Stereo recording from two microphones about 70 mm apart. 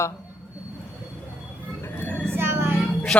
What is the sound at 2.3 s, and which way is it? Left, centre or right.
Child singing, right.